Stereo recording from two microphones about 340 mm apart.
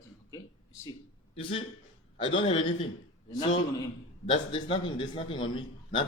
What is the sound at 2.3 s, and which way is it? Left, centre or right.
Speech, centre.